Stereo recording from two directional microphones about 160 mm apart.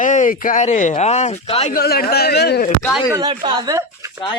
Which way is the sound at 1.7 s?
70° left (ahead or behind).